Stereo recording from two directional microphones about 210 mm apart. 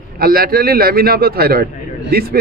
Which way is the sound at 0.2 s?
45° right (ahead or behind).